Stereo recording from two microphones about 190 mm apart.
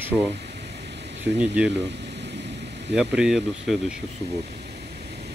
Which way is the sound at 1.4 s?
5° right (ahead or behind).